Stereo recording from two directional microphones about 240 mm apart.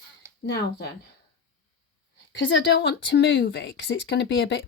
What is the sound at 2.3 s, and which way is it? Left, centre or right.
Speech, left.